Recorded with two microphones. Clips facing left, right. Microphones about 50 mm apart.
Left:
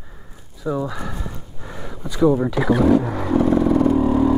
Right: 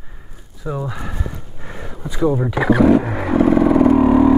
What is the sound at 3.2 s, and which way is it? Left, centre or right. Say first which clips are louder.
Vehicle: right 3 dB; right.